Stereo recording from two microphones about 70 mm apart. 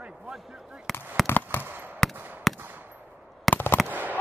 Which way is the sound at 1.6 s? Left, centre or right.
Right.